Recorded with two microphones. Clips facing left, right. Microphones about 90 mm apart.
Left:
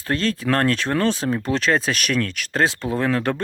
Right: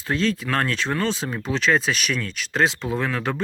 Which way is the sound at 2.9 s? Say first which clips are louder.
Left 4 dB; 45° left (ahead or behind).